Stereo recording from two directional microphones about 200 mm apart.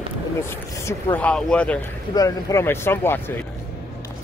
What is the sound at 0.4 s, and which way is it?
Speech, 15° left (ahead or behind).